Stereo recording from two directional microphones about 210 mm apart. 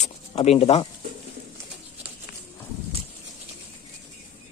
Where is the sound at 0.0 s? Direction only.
30° left (ahead or behind).